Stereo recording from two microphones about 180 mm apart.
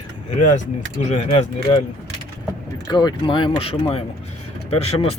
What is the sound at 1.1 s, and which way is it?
Speech, 35° left (ahead or behind).